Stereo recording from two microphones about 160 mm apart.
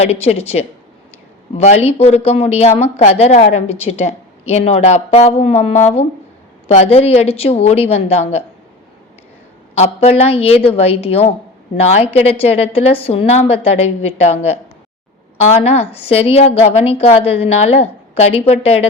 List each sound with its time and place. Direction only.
0.0 s speech: 40° left (ahead or behind)
9.7 s speech: 40° left (ahead or behind)
15.6 s speech: 40° left (ahead or behind)